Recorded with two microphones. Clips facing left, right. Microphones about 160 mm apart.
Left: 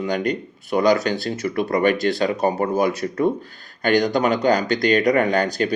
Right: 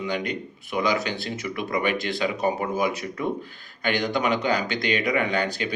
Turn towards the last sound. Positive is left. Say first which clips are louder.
# left 6 dB
turn(degrees=40)  # may be behind; listen again after turning